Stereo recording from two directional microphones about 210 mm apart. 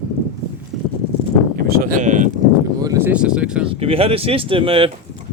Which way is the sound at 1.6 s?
45° right (ahead or behind).